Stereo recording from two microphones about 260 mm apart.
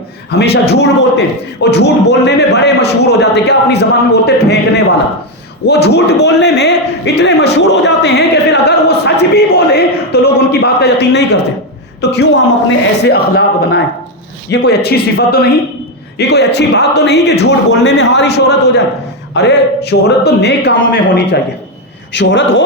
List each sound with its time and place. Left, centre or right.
0.3 s a man's voice: left
5.6 s a man's voice: left